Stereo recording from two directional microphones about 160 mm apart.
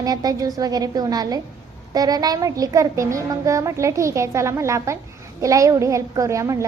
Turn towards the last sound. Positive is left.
turn(degrees=-20)  # may be behind; listen again after turning